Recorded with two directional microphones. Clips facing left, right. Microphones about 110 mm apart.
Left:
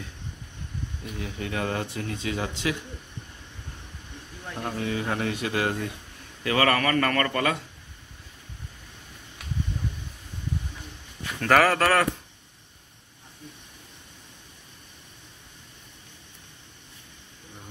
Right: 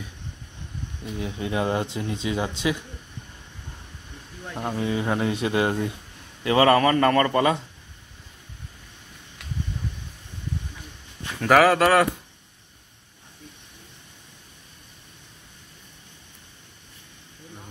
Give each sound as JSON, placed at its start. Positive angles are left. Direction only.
{"t": 1.0, "sound": "speech", "side_deg": -20}
{"t": 4.6, "sound": "speech", "side_deg": -20}
{"t": 11.4, "sound": "speech", "side_deg": -5}